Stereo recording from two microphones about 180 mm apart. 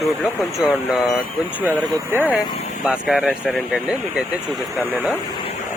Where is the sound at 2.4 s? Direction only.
25° left (ahead or behind).